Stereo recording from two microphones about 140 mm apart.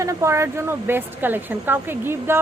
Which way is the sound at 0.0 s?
20° right (ahead or behind).